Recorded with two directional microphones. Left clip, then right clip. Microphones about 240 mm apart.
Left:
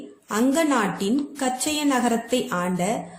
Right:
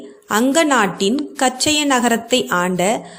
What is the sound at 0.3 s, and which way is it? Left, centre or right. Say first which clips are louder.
A woman's voice: right 7 dB; right.